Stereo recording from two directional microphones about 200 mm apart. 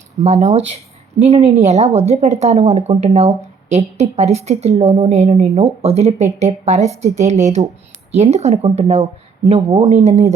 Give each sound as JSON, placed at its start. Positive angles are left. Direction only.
{"t": 0.2, "sound": "speech", "side_deg": -35}